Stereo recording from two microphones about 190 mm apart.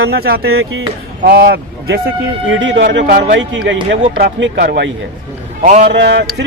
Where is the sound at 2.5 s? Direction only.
75° right (ahead or behind).